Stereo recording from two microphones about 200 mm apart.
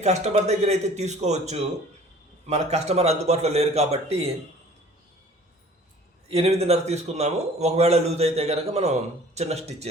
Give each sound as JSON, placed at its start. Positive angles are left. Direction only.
{"t": 0.0, "sound": "a man's voice", "side_deg": -35}
{"t": 6.3, "sound": "a man's voice", "side_deg": -30}